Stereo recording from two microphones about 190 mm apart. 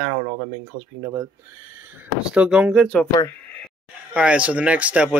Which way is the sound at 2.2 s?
5° right (ahead or behind).